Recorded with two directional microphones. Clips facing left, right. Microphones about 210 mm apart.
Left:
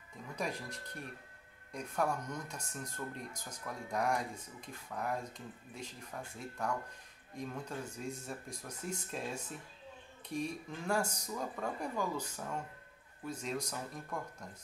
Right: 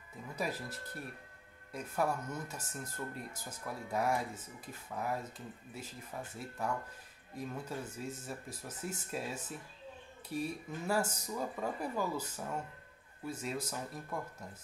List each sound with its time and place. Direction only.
0.4 s speech: 5° right (ahead or behind)